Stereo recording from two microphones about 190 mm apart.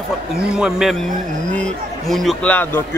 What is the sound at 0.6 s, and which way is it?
A man's voice, 5° right (ahead or behind).